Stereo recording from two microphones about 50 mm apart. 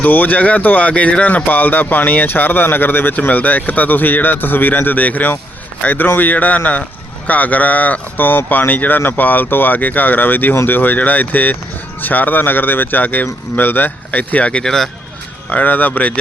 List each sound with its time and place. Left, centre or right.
0.0 s speech: left
14.5 s speech: centre
15.4 s speech: left